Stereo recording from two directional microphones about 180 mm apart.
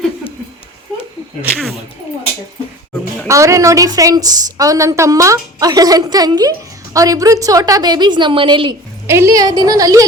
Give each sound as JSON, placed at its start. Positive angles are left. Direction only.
{"t": 3.2, "sound": "a woman's voice", "side_deg": -15}
{"t": 9.0, "sound": "a woman's voice", "side_deg": -15}